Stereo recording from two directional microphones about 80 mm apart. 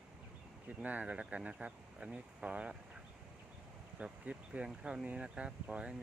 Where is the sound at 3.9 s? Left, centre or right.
Centre.